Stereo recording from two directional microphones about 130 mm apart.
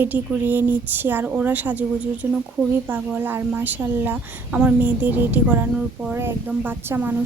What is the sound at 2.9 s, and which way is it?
A woman's voice, 15° right (ahead or behind).